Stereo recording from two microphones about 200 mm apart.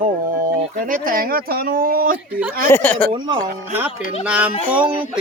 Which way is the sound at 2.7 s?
10° left (ahead or behind).